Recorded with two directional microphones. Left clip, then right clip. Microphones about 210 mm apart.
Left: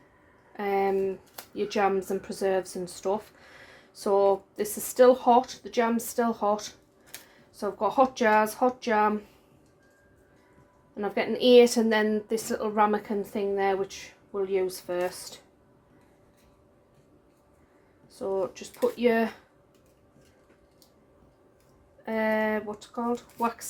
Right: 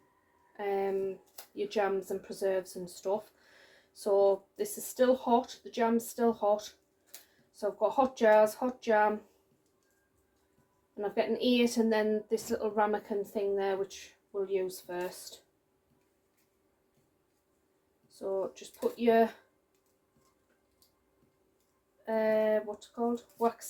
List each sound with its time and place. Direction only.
0.5 s a sound: 40° left (ahead or behind)
1.5 s a woman's voice: 35° left (ahead or behind)
10.9 s a woman's voice: 35° left (ahead or behind)
18.1 s a woman's voice: 35° left (ahead or behind)
22.0 s a woman's voice: 35° left (ahead or behind)